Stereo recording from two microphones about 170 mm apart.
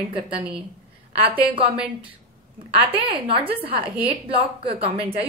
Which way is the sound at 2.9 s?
35° right (ahead or behind).